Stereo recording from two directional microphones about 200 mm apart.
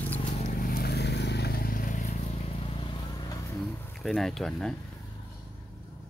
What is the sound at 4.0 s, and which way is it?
Speech, centre (ahead or behind).